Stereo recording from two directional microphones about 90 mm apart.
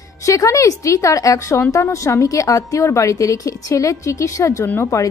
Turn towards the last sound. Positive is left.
turn(degrees=35)  # may be behind; listen again after turning